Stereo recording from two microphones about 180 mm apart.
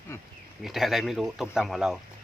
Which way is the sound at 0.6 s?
Centre (ahead or behind).